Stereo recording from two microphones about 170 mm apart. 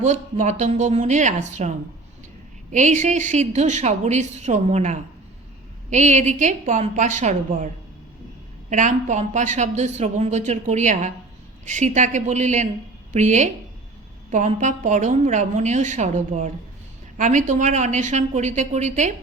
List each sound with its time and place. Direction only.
0.0 s speech: 45° right (ahead or behind)
2.7 s speech: 45° right (ahead or behind)
8.7 s speech: 45° right (ahead or behind)